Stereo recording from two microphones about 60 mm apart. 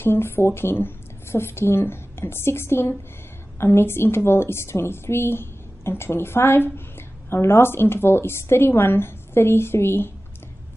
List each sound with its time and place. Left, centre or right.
0.0 s a woman's voice: left